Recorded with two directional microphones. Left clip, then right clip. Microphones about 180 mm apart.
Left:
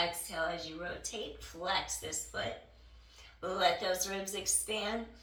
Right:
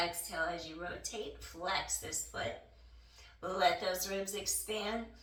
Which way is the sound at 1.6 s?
5° right (ahead or behind).